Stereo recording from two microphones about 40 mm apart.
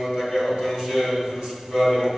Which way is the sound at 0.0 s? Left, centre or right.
Centre.